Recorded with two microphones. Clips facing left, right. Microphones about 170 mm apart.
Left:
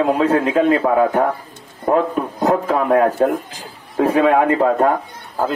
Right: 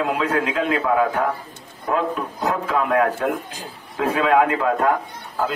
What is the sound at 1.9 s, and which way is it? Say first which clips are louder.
A man's voice: left 6 dB; 40° left (ahead or behind).